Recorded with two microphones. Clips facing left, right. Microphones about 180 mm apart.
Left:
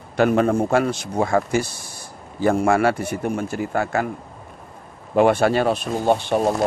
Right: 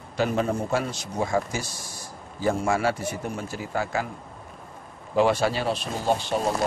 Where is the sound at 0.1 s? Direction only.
60° left (ahead or behind).